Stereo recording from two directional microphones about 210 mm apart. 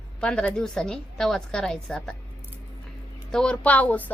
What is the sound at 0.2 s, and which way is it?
A woman's voice, 5° left (ahead or behind).